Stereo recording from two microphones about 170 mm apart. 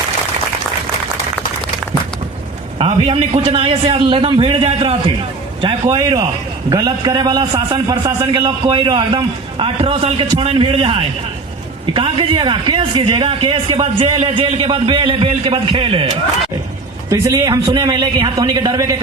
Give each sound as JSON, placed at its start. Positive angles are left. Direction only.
{"t": 2.7, "sound": "a man's voice", "side_deg": -30}
{"t": 7.7, "sound": "a man's voice", "side_deg": -15}
{"t": 17.1, "sound": "a man's voice", "side_deg": -20}